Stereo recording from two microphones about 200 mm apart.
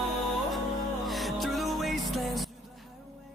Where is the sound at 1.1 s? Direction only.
Centre (ahead or behind).